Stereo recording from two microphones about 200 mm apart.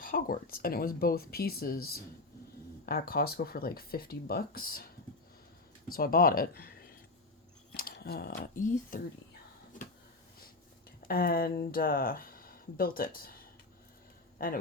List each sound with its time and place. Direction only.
0.0 s speech: 45° left (ahead or behind)
5.9 s speech: 45° left (ahead or behind)
7.8 s speech: 50° left (ahead or behind)
11.1 s speech: 45° left (ahead or behind)